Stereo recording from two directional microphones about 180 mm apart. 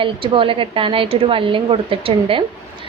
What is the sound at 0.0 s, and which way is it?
A woman's voice, 30° right (ahead or behind).